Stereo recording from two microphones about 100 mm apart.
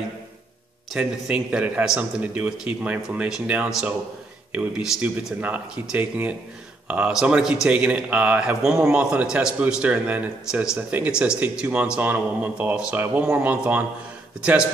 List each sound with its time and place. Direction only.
0.9 s speech: 10° right (ahead or behind)